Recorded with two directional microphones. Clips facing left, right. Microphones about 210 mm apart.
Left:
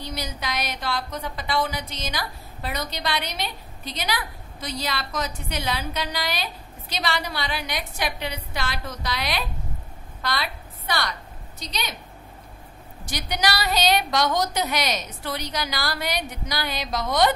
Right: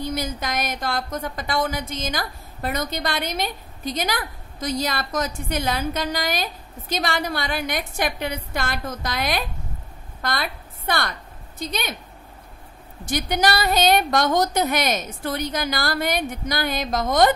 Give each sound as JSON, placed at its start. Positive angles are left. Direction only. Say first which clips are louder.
{"t": 0.0, "sound": "a woman's voice", "louder": "right 5 dB", "side_deg": -50}
{"t": 13.0, "sound": "speech", "louder": "right 5 dB", "side_deg": -50}